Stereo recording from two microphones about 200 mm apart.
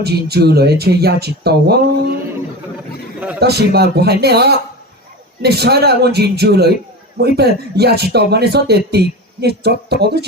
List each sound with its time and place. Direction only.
0.0 s speech: 55° right (ahead or behind)
3.4 s speech: 55° right (ahead or behind)